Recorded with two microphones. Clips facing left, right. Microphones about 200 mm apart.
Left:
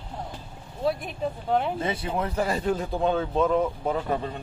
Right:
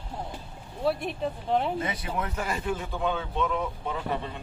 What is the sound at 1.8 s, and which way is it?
Speech, 30° left (ahead or behind).